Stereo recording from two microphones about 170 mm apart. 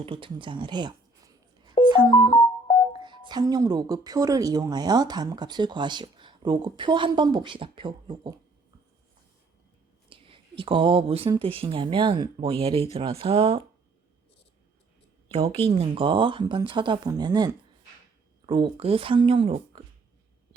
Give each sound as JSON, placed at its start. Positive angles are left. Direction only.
{"t": 0.0, "sound": "speech", "side_deg": -30}
{"t": 1.8, "sound": "telephone dialing", "side_deg": -25}
{"t": 2.3, "sound": "keyboard", "side_deg": 30}
{"t": 3.0, "sound": "speech", "side_deg": -25}
{"t": 10.1, "sound": "a sound", "side_deg": -30}
{"t": 11.3, "sound": "speech", "side_deg": -30}
{"t": 15.3, "sound": "speech", "side_deg": -35}